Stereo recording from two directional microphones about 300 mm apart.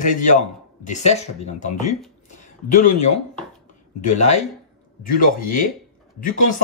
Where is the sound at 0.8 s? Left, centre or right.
Left.